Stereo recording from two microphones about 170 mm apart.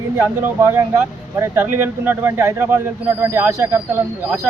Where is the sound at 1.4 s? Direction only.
15° right (ahead or behind).